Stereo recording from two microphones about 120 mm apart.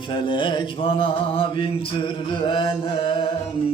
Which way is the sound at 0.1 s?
45° left (ahead or behind).